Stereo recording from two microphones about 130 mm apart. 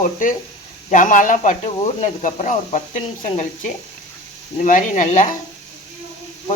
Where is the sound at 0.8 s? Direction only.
80° left.